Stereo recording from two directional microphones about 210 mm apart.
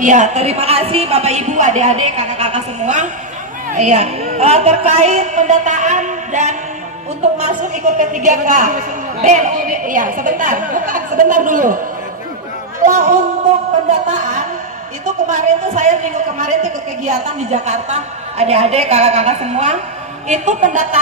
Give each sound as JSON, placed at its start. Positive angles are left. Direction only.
{"t": 0.0, "sound": "a woman's voice", "side_deg": -35}
{"t": 12.8, "sound": "a woman's voice", "side_deg": -40}